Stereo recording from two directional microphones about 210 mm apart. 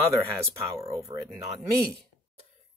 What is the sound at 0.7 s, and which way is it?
Speech, 15° right (ahead or behind).